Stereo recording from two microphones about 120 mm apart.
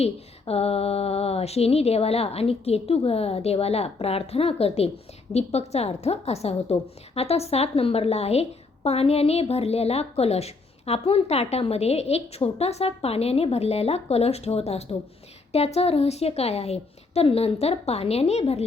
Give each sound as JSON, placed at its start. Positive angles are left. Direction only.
{"t": 0.0, "sound": "a woman's voice", "side_deg": 55}